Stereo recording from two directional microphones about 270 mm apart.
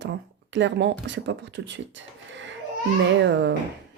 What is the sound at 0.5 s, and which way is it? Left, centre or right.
Speech, right.